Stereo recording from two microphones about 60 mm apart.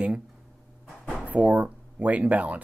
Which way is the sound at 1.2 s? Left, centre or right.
Right.